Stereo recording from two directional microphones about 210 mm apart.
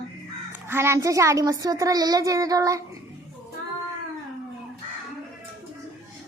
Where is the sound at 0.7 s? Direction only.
10° right (ahead or behind).